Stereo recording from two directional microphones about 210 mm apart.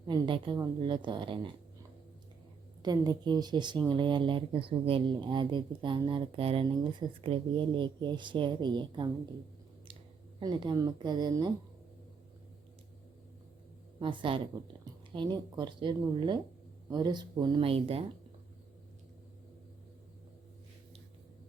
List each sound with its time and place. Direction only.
0.1 s speech: 20° right (ahead or behind)
2.8 s speech: 20° right (ahead or behind)
10.4 s speech: 20° right (ahead or behind)
14.0 s speech: 25° right (ahead or behind)